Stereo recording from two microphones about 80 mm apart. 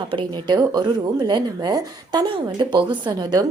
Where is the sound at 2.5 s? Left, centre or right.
Right.